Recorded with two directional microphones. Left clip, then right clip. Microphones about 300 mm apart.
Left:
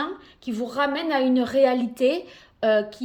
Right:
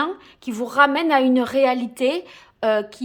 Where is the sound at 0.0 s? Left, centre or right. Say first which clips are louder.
Right 5 dB; centre.